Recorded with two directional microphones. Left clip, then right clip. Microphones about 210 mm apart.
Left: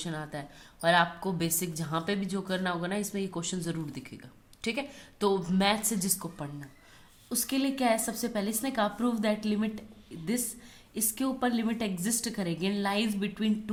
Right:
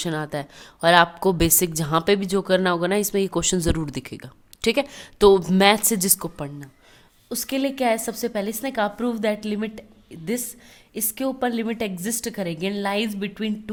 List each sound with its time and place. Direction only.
0.0 s a woman's voice: 45° right (ahead or behind)
10.9 s a woman's voice: 35° right (ahead or behind)